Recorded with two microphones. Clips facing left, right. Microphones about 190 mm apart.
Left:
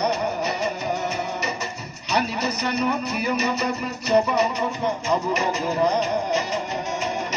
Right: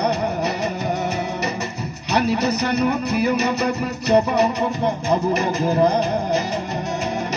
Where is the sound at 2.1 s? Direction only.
60° right (ahead or behind).